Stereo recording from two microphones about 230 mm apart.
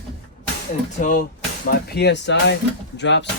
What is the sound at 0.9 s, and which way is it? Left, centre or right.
Speech, left.